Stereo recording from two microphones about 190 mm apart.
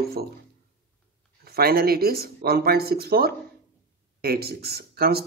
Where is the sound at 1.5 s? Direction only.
55° right (ahead or behind).